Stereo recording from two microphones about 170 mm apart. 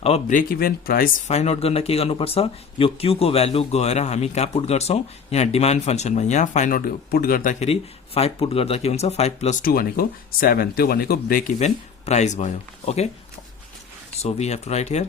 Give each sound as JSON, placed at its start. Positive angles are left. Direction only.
{"t": 0.0, "sound": "speech", "side_deg": 35}
{"t": 0.3, "sound": "speech", "side_deg": 60}
{"t": 1.3, "sound": "speech", "side_deg": 40}
{"t": 7.6, "sound": "speech", "side_deg": 35}
{"t": 14.2, "sound": "speech", "side_deg": 40}